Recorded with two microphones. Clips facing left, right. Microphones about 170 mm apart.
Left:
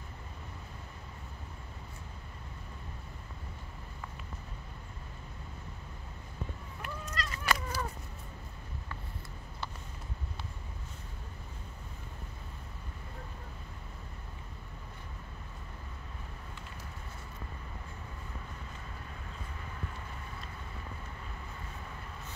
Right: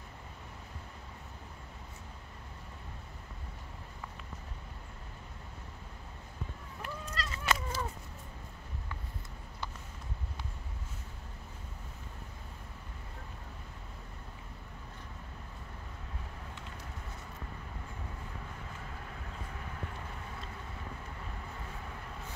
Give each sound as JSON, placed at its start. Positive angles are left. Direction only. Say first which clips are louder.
{"t": 6.8, "sound": "fowl", "louder": "even", "side_deg": -30}